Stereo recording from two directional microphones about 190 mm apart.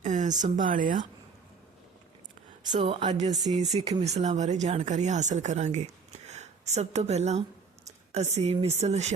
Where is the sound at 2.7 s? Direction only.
30° right (ahead or behind).